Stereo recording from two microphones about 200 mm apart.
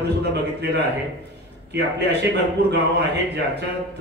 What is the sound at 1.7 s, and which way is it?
A man's voice, 55° right (ahead or behind).